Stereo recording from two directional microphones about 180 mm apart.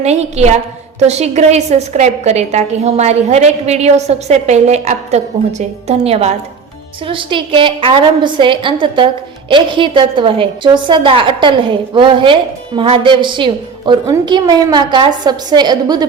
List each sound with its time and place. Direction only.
0.0 s a woman's voice: 35° right (ahead or behind)